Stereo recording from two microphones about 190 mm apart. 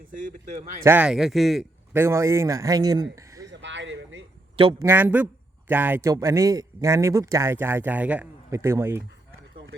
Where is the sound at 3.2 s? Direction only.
15° right (ahead or behind).